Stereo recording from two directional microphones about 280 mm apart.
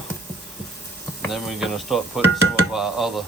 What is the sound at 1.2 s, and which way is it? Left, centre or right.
Speech, centre.